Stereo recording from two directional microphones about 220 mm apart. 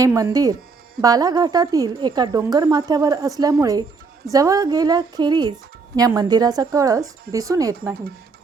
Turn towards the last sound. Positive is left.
turn(degrees=-15)  # may be behind; listen again after turning